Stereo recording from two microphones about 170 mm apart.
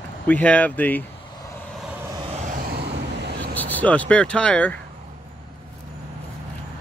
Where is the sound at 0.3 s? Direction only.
10° left (ahead or behind).